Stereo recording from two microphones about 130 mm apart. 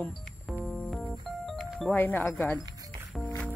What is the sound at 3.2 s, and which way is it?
Music, 10° left (ahead or behind).